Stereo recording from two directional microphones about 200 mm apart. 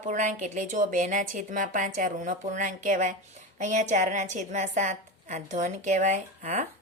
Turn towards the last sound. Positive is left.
turn(degrees=-40)  # may be behind; listen again after turning